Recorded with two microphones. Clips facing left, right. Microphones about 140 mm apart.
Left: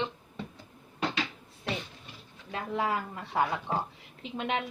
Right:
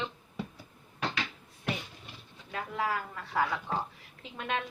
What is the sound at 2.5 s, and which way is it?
Speech, 25° left (ahead or behind).